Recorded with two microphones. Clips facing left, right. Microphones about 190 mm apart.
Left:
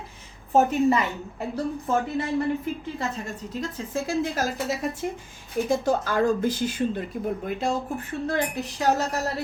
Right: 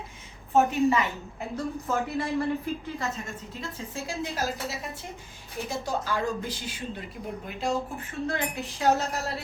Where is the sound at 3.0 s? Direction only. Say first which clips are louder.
Left 3 dB; 35° left (ahead or behind).